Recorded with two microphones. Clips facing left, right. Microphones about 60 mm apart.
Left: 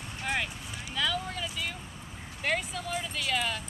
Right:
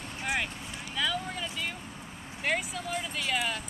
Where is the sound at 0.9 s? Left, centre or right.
Centre.